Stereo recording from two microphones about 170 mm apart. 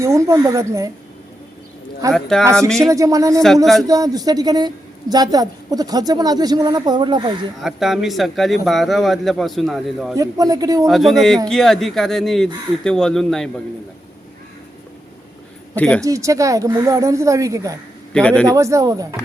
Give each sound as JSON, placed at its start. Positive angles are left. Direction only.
{"t": 0.0, "sound": "speech", "side_deg": -15}
{"t": 2.1, "sound": "speech", "side_deg": 0}
{"t": 2.9, "sound": "a woman's voice", "side_deg": -20}
{"t": 7.6, "sound": "speech", "side_deg": 0}
{"t": 10.2, "sound": "a woman's voice", "side_deg": -20}
{"t": 10.8, "sound": "speech", "side_deg": 0}
{"t": 15.7, "sound": "speech", "side_deg": 5}
{"t": 16.0, "sound": "a woman's voice", "side_deg": -20}
{"t": 18.1, "sound": "speech", "side_deg": 5}
{"t": 18.4, "sound": "a woman's voice", "side_deg": -20}